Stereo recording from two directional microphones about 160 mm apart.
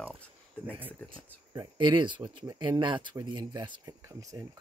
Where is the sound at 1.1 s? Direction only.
30° right (ahead or behind).